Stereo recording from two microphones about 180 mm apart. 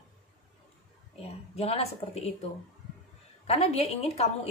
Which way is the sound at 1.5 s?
35° left (ahead or behind).